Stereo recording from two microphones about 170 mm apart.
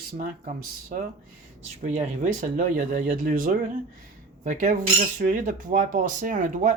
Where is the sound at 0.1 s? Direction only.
50° right (ahead or behind).